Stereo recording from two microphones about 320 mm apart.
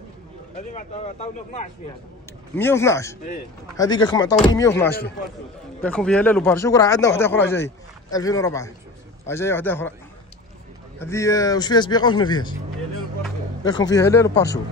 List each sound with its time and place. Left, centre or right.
0.7 s speech: left
2.5 s speech: centre
11.0 s speech: centre
13.7 s speech: centre